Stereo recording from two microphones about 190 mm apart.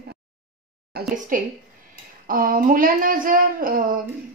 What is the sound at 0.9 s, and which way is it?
A woman's voice, 50° right (ahead or behind).